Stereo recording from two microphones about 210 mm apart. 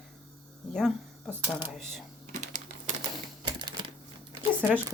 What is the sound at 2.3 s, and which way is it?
Typing, 35° right (ahead or behind).